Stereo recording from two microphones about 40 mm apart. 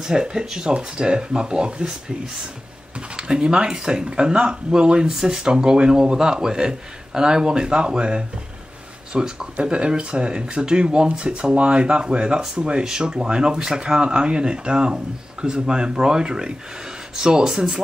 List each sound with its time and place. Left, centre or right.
0.0 s speech: centre
3.2 s speech: right